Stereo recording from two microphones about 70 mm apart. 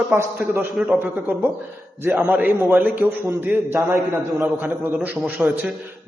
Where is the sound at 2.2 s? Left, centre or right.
Right.